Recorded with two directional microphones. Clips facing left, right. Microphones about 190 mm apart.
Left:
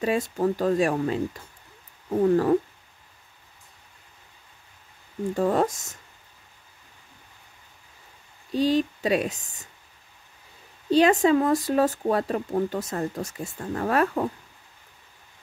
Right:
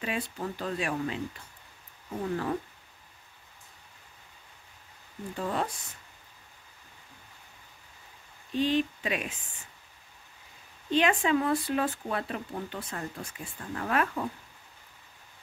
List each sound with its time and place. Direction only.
0.0 s speech: 40° left (ahead or behind)
5.3 s speech: 45° left (ahead or behind)
8.5 s speech: 35° left (ahead or behind)
10.9 s speech: 40° left (ahead or behind)